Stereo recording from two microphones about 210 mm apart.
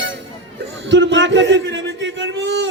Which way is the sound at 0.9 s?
60° right (ahead or behind).